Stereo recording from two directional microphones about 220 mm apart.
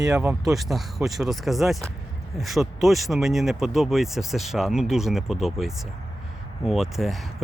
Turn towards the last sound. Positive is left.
turn(degrees=0)  # may be behind; listen again after turning